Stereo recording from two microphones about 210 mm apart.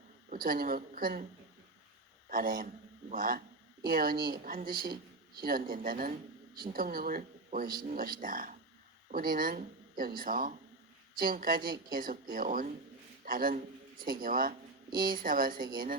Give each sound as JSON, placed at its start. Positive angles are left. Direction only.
{"t": 0.3, "sound": "speech", "side_deg": -45}
{"t": 2.3, "sound": "speech", "side_deg": -40}